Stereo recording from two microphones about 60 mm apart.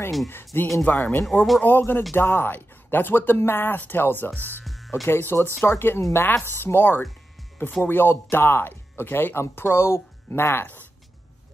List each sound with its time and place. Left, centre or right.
0.5 s speech: left
1.2 s speech: centre
1.6 s speech: left
4.6 s music: centre
5.0 s speech: left